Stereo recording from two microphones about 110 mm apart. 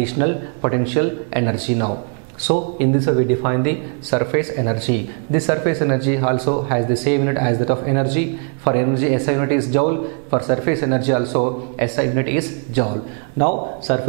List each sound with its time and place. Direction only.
0.0 s speech: 10° right (ahead or behind)
3.1 s speech: 10° right (ahead or behind)